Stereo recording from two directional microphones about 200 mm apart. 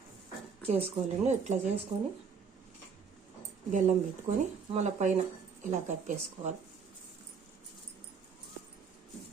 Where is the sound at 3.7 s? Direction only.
40° right (ahead or behind).